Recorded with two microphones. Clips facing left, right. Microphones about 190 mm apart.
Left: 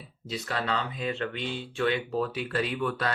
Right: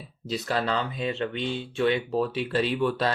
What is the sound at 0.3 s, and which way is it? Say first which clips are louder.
Speech: right 4 dB; 35° right (ahead or behind).